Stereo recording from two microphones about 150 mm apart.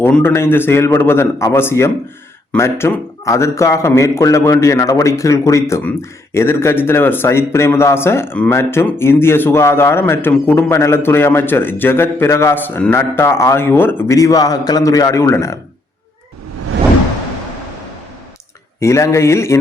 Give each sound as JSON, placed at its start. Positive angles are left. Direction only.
{"t": 0.0, "sound": "a man's voice", "side_deg": 15}
{"t": 18.8, "sound": "a man's voice", "side_deg": 20}